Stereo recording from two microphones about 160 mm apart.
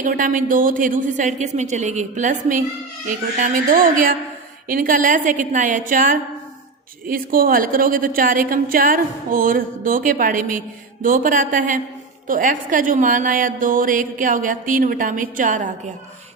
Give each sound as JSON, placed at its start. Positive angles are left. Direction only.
{"t": 0.0, "sound": "a woman's voice", "side_deg": -55}